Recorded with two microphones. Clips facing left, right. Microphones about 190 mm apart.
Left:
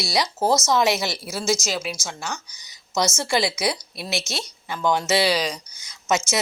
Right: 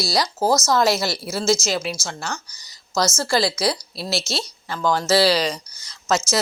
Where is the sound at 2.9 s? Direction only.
20° left (ahead or behind).